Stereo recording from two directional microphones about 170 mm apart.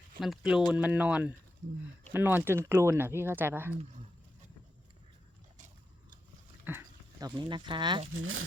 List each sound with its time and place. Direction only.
0.2 s speech: centre (ahead or behind)
6.7 s speech: 10° right (ahead or behind)
7.2 s speech: 25° right (ahead or behind)